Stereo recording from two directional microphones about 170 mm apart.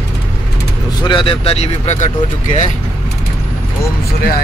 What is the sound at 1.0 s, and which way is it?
Speech, 30° left (ahead or behind).